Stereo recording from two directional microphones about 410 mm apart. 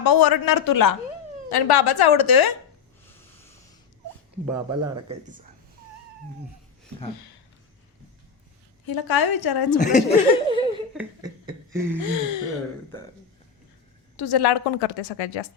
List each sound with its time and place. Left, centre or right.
0.0 s a man's voice: left
1.5 s a woman's voice: left
4.4 s speech: centre
8.9 s a woman's voice: left
9.7 s speech: centre
10.9 s a sound: centre
14.2 s a woman's voice: left